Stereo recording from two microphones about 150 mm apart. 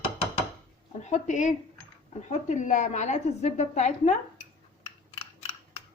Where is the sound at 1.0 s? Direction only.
50° left (ahead or behind).